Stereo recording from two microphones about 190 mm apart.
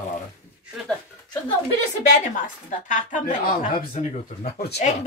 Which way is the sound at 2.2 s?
40° left (ahead or behind).